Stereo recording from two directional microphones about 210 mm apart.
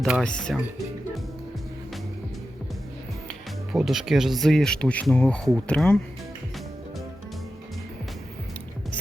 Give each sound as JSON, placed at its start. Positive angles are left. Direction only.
{"t": 0.0, "sound": "speech", "side_deg": 0}
{"t": 3.2, "sound": "speech", "side_deg": 0}